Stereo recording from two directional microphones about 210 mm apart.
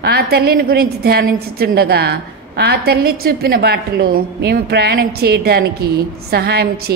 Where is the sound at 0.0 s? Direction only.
50° right (ahead or behind).